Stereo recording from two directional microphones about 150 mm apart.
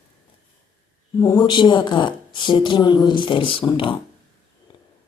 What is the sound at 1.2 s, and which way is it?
A woman's voice, 30° left (ahead or behind).